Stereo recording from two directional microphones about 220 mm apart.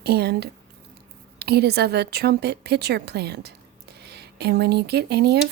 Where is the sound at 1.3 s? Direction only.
45° right (ahead or behind).